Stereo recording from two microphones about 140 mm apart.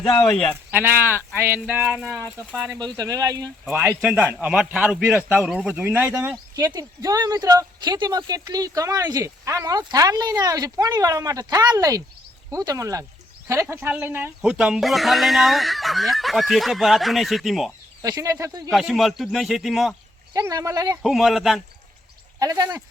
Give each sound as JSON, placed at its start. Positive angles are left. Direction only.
{"t": 0.5, "sound": "a man's voice", "side_deg": -15}
{"t": 3.0, "sound": "speech", "side_deg": -25}
{"t": 3.7, "sound": "a man's voice", "side_deg": -10}
{"t": 6.7, "sound": "speech", "side_deg": -25}
{"t": 18.0, "sound": "speech", "side_deg": -25}
{"t": 18.7, "sound": "speech", "side_deg": 0}
{"t": 20.3, "sound": "speech", "side_deg": -25}
{"t": 21.0, "sound": "speech", "side_deg": 0}
{"t": 22.4, "sound": "speech", "side_deg": -25}